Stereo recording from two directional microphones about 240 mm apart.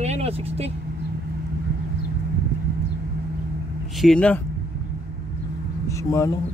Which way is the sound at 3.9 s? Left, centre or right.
Centre.